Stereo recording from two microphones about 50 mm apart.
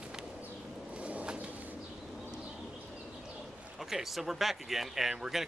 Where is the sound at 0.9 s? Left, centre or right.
Right.